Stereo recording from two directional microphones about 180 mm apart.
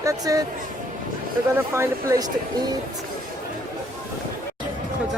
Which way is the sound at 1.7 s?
15° right (ahead or behind).